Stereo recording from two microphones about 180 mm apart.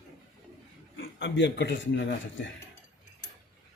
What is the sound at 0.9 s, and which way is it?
Speech, 80° left.